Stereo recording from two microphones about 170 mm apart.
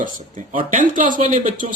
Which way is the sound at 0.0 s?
50° right (ahead or behind).